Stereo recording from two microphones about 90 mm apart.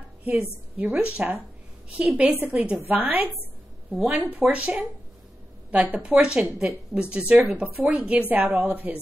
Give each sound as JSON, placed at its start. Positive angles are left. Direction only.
{"t": 0.2, "sound": "a woman's voice", "side_deg": -15}